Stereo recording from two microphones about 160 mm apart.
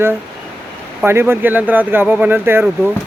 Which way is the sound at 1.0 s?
15° right (ahead or behind).